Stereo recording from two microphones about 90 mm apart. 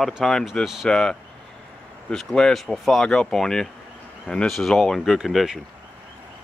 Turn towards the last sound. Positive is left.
turn(degrees=0)  # may be behind; listen again after turning